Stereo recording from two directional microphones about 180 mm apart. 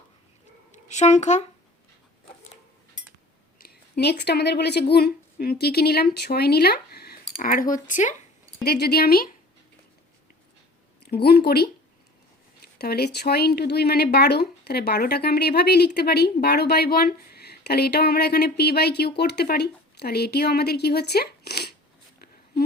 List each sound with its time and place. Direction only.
0.9 s speech: 40° left (ahead or behind)
3.6 s speech: 60° left (ahead or behind); by 8.1 s 45° left (ahead or behind)
8.6 s speech: 60° left (ahead or behind)
11.0 s speech: 60° left (ahead or behind)
12.8 s speech: 60° left (ahead or behind)